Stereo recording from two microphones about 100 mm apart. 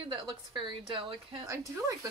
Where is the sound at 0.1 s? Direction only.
55° right (ahead or behind).